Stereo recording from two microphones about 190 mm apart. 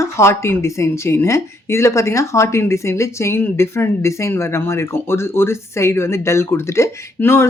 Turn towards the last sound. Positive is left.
turn(degrees=15)  # may be behind; listen again after turning